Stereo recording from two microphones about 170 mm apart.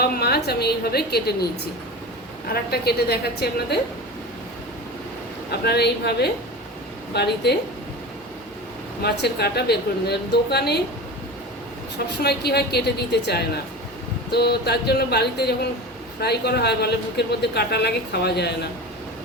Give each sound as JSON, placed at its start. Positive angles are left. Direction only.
{"t": 0.0, "sound": "a woman's voice", "side_deg": 70}
{"t": 2.5, "sound": "a woman's voice", "side_deg": 70}
{"t": 5.5, "sound": "a woman's voice", "side_deg": 70}
{"t": 9.0, "sound": "a woman's voice", "side_deg": 75}
{"t": 12.2, "sound": "a woman's voice", "side_deg": 70}